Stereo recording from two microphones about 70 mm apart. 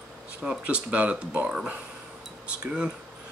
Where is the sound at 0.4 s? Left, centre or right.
Centre.